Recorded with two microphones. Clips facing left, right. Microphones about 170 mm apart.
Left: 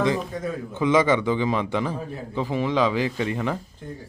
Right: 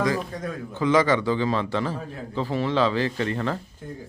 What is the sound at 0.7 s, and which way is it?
A man's voice, 20° left (ahead or behind).